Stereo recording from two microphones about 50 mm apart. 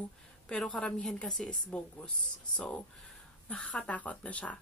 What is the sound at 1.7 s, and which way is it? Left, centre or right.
Speech, left.